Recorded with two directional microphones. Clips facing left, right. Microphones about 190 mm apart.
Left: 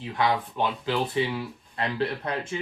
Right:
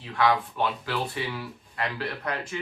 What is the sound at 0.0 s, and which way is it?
Speech, 20° left (ahead or behind).